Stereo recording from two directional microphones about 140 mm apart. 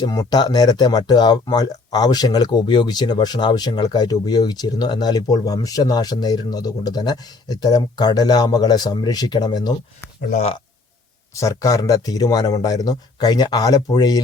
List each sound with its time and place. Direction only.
0.0 s speech: 30° left (ahead or behind)
10.2 s speech: 70° left (ahead or behind)
11.3 s speech: 20° left (ahead or behind)